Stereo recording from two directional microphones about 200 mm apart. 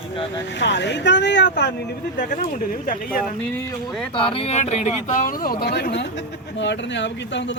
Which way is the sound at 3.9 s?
5° left (ahead or behind).